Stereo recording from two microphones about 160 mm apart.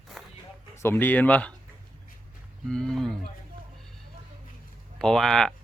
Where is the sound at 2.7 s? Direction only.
5° left (ahead or behind).